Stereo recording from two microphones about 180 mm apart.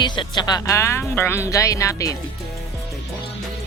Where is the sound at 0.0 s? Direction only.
25° left (ahead or behind).